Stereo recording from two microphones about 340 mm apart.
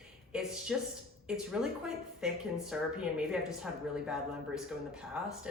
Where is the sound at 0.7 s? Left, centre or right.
Centre.